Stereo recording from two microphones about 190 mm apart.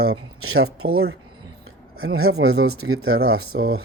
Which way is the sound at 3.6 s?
90° right.